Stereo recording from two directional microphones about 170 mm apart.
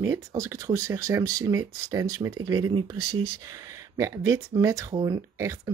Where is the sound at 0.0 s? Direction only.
15° right (ahead or behind).